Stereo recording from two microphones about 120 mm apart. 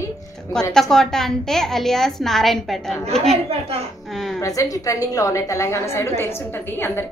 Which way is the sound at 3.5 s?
55° right (ahead or behind).